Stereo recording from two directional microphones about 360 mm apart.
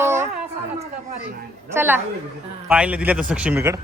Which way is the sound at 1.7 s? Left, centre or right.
Centre.